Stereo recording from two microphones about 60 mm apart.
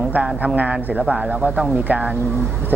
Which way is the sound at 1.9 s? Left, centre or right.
Right.